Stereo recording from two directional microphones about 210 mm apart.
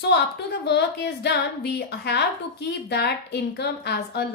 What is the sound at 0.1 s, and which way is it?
A woman's voice, 55° left (ahead or behind).